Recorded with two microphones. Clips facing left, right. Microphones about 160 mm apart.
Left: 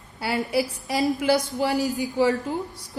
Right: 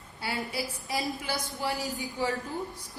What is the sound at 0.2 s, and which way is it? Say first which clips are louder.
A woman's voice: left 9 dB; 70° left (ahead or behind).